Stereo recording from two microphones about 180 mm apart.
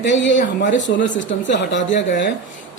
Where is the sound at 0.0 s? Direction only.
85° left.